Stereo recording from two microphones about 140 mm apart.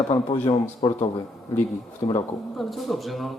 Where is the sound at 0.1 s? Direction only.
40° left (ahead or behind).